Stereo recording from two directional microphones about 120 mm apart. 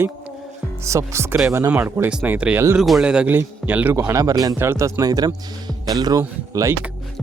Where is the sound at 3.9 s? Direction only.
25° right (ahead or behind).